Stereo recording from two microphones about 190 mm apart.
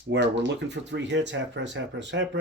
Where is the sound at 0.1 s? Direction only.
65° right (ahead or behind).